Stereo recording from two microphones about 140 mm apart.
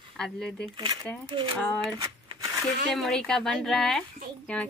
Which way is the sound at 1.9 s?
25° right (ahead or behind).